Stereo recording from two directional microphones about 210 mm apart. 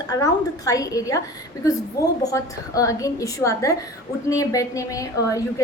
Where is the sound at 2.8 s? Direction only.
15° left (ahead or behind).